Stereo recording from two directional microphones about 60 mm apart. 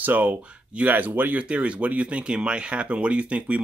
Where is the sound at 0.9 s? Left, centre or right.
Right.